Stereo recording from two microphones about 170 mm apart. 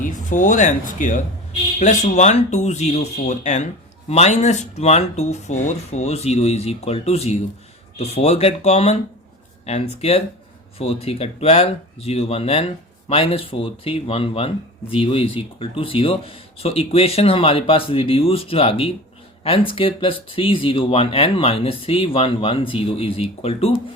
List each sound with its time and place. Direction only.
0.0 s speech: 45° left (ahead or behind)